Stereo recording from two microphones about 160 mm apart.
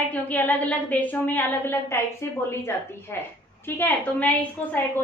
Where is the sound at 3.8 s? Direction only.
10° left (ahead or behind).